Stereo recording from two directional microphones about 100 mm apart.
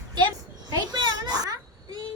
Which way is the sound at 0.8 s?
45° right (ahead or behind).